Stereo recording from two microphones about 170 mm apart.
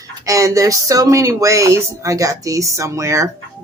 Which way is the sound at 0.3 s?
20° right (ahead or behind).